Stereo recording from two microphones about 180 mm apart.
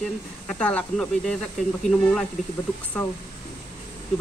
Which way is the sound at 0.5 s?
5° left (ahead or behind).